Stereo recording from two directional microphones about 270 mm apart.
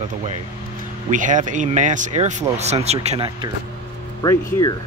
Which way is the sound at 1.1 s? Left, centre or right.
Right.